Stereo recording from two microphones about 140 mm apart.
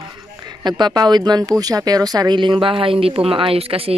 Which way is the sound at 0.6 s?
30° right (ahead or behind).